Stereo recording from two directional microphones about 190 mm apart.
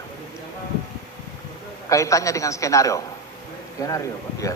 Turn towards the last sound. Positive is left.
turn(degrees=15)  # may be behind; listen again after turning